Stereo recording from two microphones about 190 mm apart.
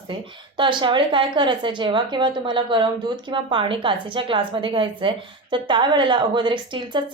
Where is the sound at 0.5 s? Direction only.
25° right (ahead or behind).